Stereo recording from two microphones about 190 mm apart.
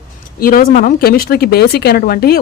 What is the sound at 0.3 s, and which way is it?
Speech, 50° left (ahead or behind).